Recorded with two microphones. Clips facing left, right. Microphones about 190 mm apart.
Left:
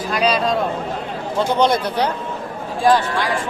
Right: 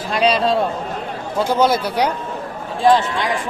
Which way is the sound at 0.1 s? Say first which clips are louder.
Right 2 dB; 30° right (ahead or behind).